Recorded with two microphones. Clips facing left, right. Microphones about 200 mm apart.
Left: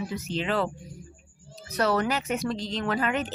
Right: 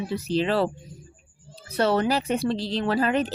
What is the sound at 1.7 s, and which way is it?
Speech, 30° right (ahead or behind).